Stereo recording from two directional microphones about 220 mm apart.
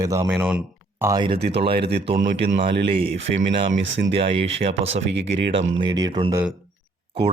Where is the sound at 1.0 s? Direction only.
20° right (ahead or behind).